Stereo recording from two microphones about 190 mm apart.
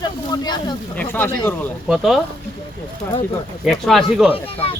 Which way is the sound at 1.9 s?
Centre (ahead or behind).